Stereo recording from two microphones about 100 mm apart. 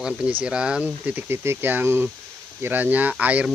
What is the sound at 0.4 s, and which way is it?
Speech, 10° right (ahead or behind).